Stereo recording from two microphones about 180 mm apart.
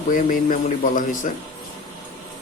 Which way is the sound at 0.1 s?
50° left (ahead or behind).